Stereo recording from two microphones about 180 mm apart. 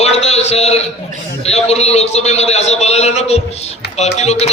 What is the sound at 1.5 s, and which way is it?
A man's voice, 35° left (ahead or behind).